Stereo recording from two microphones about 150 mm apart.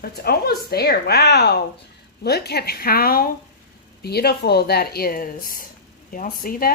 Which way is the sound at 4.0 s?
90° left.